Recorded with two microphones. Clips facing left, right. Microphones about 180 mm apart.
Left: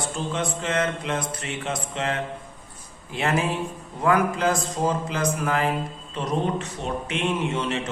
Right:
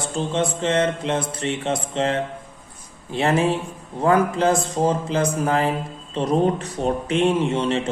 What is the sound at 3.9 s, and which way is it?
A man's voice, 30° right (ahead or behind).